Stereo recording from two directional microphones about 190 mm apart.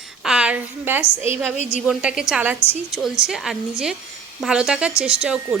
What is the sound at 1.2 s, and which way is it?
Speech, 35° left (ahead or behind).